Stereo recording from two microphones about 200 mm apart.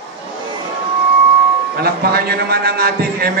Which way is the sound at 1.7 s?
50° right (ahead or behind).